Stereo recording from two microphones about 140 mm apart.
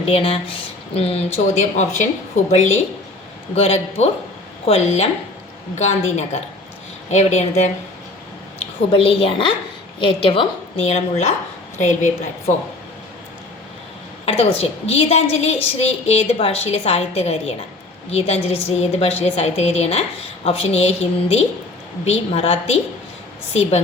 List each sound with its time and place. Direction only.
0.1 s a woman's voice: 45° left (ahead or behind)
8.5 s a woman's voice: 45° left (ahead or behind); by 12.1 s 60° left (ahead or behind)
14.3 s a woman's voice: 50° left (ahead or behind)